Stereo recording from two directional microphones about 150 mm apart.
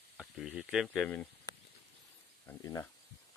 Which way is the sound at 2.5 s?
20° left (ahead or behind).